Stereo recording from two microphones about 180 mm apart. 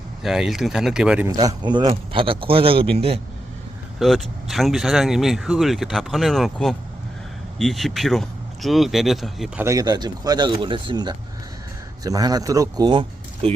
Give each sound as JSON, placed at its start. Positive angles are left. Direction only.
{"t": 0.2, "sound": "speech", "side_deg": 0}
{"t": 1.3, "sound": "a man's voice", "side_deg": -20}
{"t": 4.0, "sound": "speech", "side_deg": 0}
{"t": 9.6, "sound": "a man's voice", "side_deg": -20}